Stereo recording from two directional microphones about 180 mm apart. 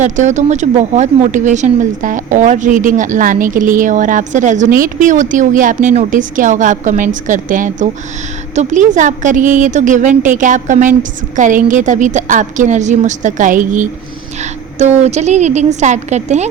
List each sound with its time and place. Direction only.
0.0 s a woman's voice: 40° right (ahead or behind)